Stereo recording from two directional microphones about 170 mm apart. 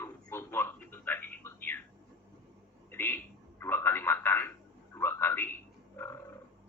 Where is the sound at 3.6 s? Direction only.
10° left (ahead or behind).